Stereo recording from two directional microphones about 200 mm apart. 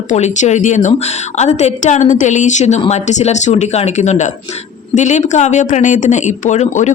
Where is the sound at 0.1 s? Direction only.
35° left (ahead or behind).